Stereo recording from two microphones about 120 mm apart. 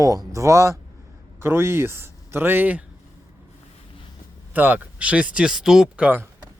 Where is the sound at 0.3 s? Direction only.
25° right (ahead or behind).